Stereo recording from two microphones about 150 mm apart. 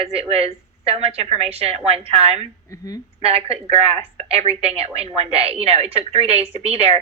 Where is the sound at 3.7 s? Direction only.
40° right (ahead or behind).